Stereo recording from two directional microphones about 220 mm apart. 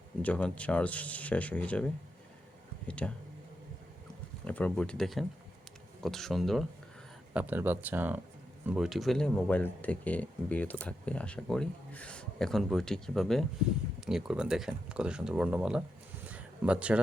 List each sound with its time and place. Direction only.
0.2 s speech: 5° left (ahead or behind)
2.8 s speech: 5° left (ahead or behind)
4.4 s speech: 5° left (ahead or behind)
16.2 s a sound: 5° right (ahead or behind)